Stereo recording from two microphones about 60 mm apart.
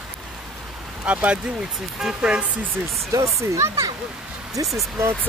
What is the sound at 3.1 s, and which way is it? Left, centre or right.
Speech, right.